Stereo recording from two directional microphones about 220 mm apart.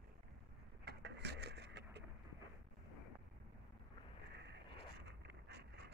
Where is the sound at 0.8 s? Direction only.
50° right (ahead or behind).